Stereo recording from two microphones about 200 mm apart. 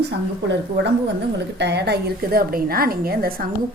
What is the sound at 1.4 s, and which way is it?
A woman's voice, 60° right (ahead or behind).